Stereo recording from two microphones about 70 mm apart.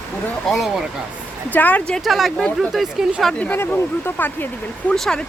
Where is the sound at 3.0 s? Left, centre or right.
Centre.